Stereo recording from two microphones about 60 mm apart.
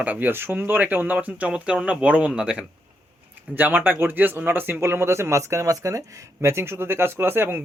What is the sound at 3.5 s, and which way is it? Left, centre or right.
Speech, right.